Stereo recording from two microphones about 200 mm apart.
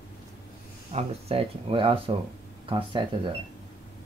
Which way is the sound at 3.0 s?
25° right (ahead or behind).